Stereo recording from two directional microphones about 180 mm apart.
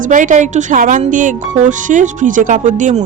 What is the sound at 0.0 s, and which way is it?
Speech, 45° right (ahead or behind).